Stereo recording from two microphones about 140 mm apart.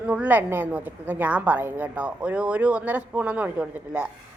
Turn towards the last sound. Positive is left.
turn(degrees=-10)  # may be behind; listen again after turning